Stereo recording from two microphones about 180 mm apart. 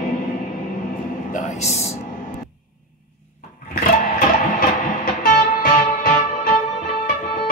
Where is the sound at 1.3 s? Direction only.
40° left (ahead or behind).